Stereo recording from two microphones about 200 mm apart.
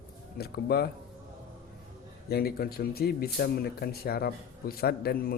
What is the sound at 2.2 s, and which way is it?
Speech, 50° left (ahead or behind).